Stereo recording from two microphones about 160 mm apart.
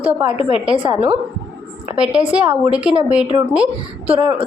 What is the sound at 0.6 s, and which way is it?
Speech, 10° right (ahead or behind).